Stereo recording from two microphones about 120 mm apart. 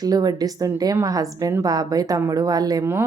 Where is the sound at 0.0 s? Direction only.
35° right (ahead or behind).